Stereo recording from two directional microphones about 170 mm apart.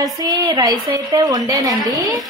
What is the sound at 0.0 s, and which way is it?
A woman's voice, 20° right (ahead or behind).